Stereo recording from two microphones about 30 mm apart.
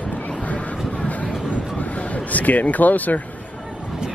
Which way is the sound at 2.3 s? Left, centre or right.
Left.